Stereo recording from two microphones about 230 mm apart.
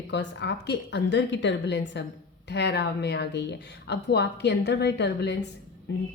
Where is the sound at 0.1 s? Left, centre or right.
Left.